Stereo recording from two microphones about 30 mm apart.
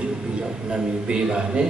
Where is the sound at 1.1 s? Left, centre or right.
Right.